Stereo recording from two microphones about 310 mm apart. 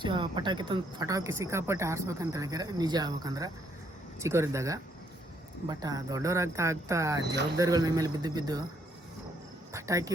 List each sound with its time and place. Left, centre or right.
0.0 s speech: centre
9.7 s speech: centre